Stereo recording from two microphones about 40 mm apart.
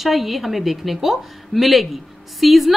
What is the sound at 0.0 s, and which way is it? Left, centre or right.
A woman's voice, centre.